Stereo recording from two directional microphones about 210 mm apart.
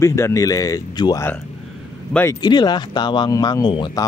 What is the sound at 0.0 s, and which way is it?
Speech, 15° left (ahead or behind).